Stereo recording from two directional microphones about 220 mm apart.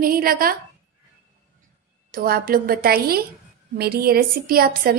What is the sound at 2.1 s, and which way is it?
A woman's voice, 40° right (ahead or behind).